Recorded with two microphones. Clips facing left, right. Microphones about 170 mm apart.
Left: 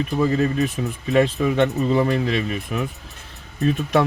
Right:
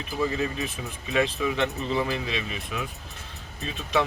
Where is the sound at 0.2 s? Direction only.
55° left (ahead or behind).